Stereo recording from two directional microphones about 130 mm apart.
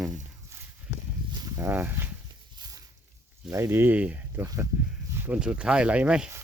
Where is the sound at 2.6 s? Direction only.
30° right (ahead or behind).